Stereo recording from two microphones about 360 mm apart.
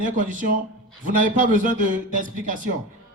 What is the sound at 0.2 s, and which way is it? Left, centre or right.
A man's voice, right.